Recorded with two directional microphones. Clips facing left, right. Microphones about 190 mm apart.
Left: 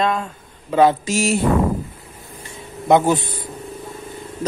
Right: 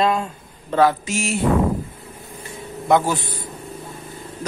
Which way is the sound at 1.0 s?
40° left (ahead or behind).